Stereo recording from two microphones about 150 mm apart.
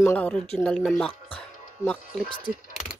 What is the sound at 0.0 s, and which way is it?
Speech, 10° left (ahead or behind).